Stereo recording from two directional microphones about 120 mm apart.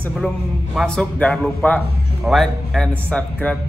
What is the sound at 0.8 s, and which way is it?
A man's voice, 5° left (ahead or behind).